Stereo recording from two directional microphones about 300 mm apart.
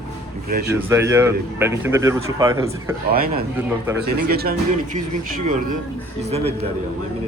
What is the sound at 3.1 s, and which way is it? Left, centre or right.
Speech, right.